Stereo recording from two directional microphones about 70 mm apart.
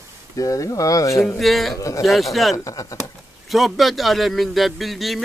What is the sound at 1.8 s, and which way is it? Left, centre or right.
Speech, left.